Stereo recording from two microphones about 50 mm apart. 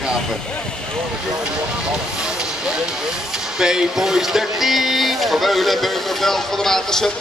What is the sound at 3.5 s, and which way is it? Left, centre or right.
Speech, centre.